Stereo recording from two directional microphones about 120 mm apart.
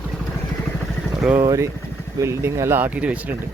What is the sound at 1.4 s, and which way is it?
Speech, 30° right (ahead or behind).